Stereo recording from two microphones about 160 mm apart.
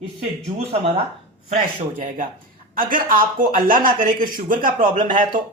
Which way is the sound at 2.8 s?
60° right (ahead or behind).